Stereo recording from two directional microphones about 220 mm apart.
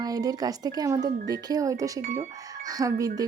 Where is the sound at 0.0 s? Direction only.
15° right (ahead or behind).